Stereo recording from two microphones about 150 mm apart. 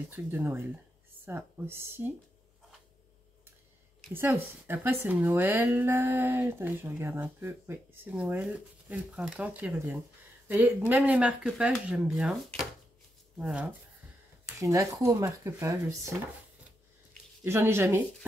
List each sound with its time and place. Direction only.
0.1 s speech: 15° right (ahead or behind)
4.1 s speech: 15° right (ahead or behind)
13.4 s speech: 5° right (ahead or behind)
14.6 s speech: 20° right (ahead or behind)
17.4 s speech: 15° right (ahead or behind)